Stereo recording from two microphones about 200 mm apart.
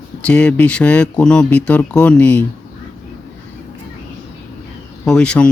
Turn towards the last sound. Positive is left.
turn(degrees=5)  # may be behind; listen again after turning